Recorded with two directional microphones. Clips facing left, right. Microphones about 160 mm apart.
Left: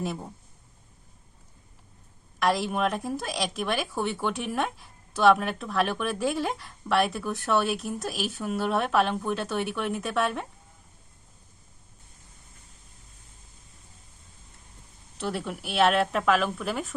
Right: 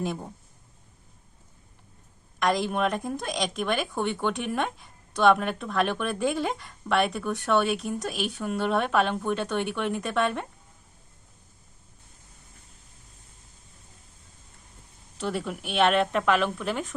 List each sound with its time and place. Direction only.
0.0 s speech: centre (ahead or behind)
2.4 s speech: 5° left (ahead or behind)
15.2 s speech: centre (ahead or behind)